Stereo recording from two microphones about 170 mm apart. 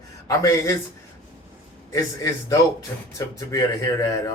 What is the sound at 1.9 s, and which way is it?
A man's voice, 20° left (ahead or behind).